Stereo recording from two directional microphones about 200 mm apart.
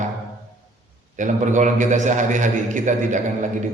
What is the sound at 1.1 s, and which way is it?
A man's voice, 40° right (ahead or behind).